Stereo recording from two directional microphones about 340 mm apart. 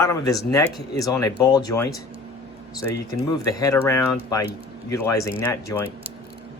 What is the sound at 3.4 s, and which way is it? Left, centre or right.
Speech, centre.